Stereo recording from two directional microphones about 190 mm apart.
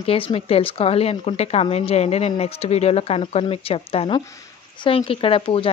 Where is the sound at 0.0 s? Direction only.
30° left (ahead or behind).